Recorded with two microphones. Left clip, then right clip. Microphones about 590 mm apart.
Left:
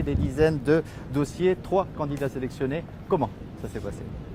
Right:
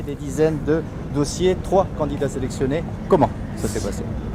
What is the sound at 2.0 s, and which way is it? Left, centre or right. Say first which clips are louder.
Speech: right 6 dB; left.